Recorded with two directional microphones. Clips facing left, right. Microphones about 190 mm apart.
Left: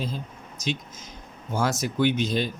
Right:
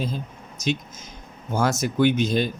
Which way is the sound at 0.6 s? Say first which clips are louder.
Right 4 dB; 45° right (ahead or behind).